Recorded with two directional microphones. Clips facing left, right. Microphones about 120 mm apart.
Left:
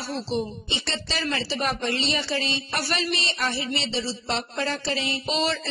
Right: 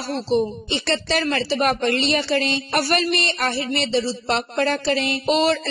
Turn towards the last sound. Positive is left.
turn(degrees=-55)  # may be behind; listen again after turning